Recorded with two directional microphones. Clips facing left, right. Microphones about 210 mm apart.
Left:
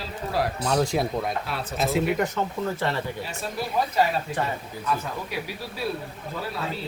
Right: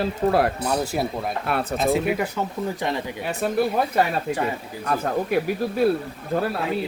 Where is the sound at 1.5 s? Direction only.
60° right (ahead or behind).